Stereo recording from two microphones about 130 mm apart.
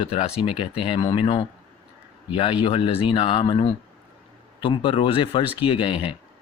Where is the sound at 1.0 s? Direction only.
30° left (ahead or behind).